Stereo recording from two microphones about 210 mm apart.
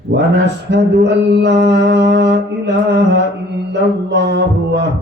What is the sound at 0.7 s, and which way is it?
Music, 55° right (ahead or behind).